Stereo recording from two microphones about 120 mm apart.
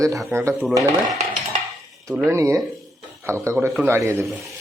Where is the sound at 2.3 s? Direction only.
25° right (ahead or behind).